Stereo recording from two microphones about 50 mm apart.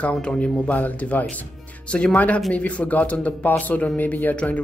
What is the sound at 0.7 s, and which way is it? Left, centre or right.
Speech, left.